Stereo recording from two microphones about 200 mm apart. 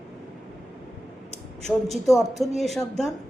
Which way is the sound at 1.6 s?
Centre (ahead or behind).